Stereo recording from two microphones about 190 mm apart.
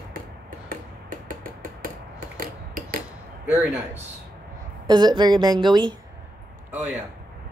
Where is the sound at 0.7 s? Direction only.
50° right (ahead or behind).